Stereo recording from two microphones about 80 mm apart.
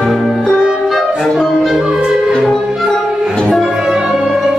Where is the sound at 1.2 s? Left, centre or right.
Centre.